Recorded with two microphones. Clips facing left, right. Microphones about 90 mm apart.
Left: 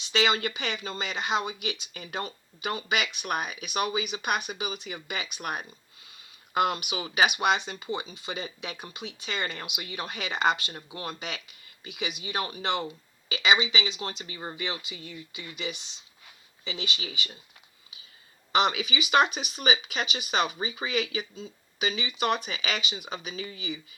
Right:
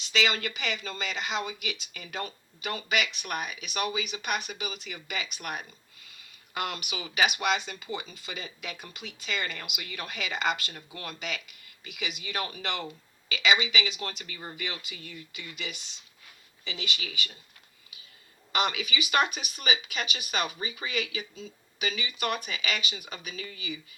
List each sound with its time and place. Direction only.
0.0 s speech: 30° left (ahead or behind)
2.9 s speech: 40° left (ahead or behind)
6.9 s speech: 35° left (ahead or behind)
12.2 s speech: 25° left (ahead or behind)
18.5 s speech: 25° left (ahead or behind)